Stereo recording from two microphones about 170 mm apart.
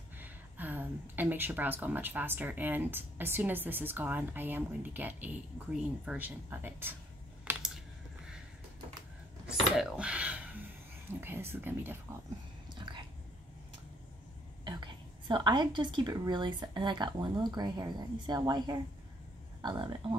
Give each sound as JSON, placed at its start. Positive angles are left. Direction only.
{"t": 0.2, "sound": "speech", "side_deg": -10}
{"t": 7.4, "sound": "typing", "side_deg": -5}
{"t": 9.6, "sound": "a sound", "side_deg": 0}
{"t": 11.1, "sound": "speech", "side_deg": -15}
{"t": 12.7, "sound": "a sound", "side_deg": -25}
{"t": 14.6, "sound": "a woman's voice", "side_deg": -25}